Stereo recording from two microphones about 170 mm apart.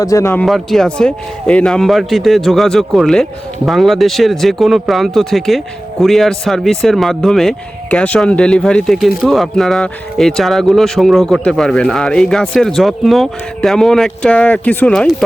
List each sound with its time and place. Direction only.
0.0 s speech: 20° left (ahead or behind)
0.4 s speech: centre (ahead or behind)